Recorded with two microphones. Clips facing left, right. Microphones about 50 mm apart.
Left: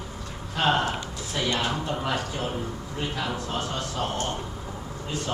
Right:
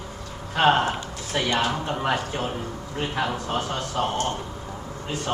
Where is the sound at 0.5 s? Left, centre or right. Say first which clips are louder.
Right 4 dB; right.